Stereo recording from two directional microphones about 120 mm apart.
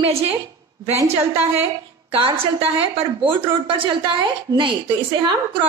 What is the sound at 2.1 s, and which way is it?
A woman's voice, 45° right (ahead or behind).